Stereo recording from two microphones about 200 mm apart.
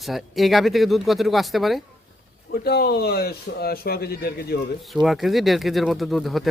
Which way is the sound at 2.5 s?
50° left (ahead or behind).